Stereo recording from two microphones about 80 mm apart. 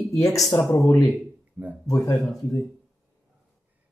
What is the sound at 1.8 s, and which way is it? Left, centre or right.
Speech, left.